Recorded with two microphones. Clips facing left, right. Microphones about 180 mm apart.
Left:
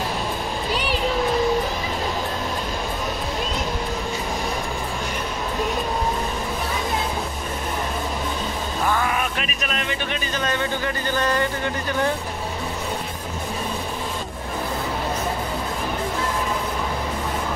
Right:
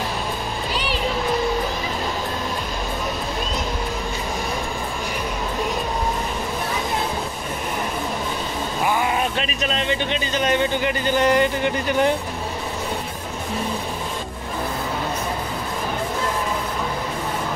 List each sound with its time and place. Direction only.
8.8 s music: 15° right (ahead or behind)
9.1 s speech: 30° right (ahead or behind)